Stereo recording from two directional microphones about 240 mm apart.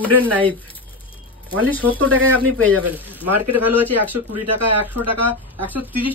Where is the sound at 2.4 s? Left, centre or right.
Right.